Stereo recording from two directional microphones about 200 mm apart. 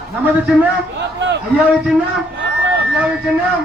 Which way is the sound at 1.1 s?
60° right (ahead or behind).